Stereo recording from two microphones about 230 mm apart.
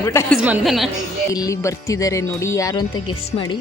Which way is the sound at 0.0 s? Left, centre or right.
Centre.